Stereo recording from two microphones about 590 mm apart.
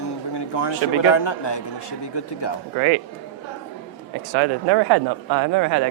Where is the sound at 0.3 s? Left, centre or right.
Left.